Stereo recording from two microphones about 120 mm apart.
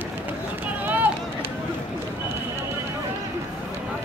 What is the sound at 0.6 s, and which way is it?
Run, 15° right (ahead or behind).